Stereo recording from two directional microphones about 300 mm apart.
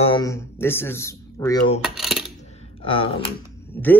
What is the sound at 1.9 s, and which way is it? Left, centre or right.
Coin, centre.